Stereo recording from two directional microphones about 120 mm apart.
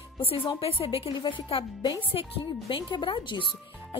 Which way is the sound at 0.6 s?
50° left (ahead or behind).